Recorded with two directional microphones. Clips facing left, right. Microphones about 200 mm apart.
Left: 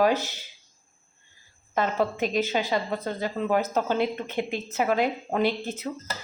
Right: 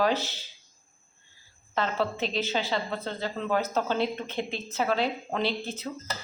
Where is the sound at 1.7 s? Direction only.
15° left (ahead or behind).